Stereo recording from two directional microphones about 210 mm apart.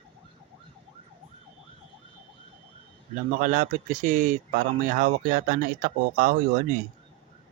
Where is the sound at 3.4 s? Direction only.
35° right (ahead or behind).